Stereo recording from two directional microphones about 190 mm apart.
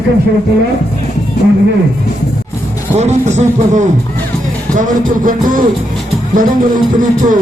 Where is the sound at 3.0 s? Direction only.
35° right (ahead or behind).